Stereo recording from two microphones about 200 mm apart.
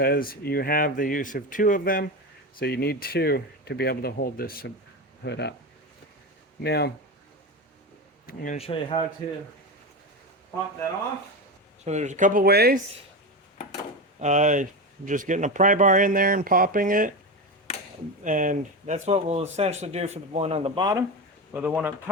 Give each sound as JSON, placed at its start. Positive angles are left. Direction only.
{"t": 0.0, "sound": "speech", "side_deg": 45}
{"t": 5.2, "sound": "speech", "side_deg": 60}
{"t": 6.6, "sound": "speech", "side_deg": 55}
{"t": 8.5, "sound": "speech", "side_deg": 30}
{"t": 11.9, "sound": "speech", "side_deg": -35}
{"t": 14.2, "sound": "speech", "side_deg": -35}
{"t": 18.2, "sound": "speech", "side_deg": -40}
{"t": 21.5, "sound": "speech", "side_deg": -10}